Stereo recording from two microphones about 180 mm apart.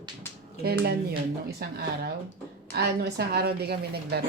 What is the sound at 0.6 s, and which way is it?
A woman's voice, 60° right (ahead or behind).